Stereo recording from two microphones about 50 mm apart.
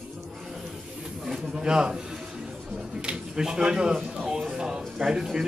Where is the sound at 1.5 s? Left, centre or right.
Centre.